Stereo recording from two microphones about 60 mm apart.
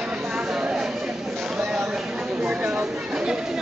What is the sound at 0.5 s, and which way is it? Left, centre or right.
Chatter, centre.